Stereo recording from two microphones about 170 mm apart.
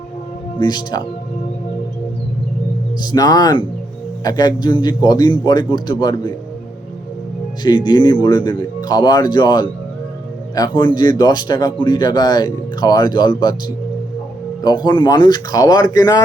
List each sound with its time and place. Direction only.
0.6 s speech: 25° left (ahead or behind)
3.0 s speech: 25° left (ahead or behind)
7.6 s speech: 25° left (ahead or behind)
14.6 s speech: 25° left (ahead or behind)